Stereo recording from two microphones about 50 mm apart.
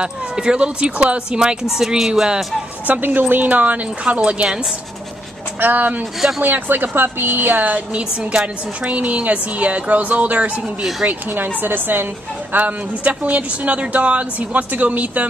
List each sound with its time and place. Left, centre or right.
0.0 s a woman's voice: centre
2.9 s a woman's voice: right
4.5 s speech: centre
5.6 s a woman's voice: right
6.1 s speech: centre
6.4 s a woman's voice: right
8.0 s a woman's voice: centre
11.1 s a woman's voice: right
12.5 s a woman's voice: right